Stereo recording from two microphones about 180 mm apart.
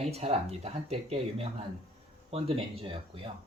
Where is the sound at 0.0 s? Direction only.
35° right (ahead or behind).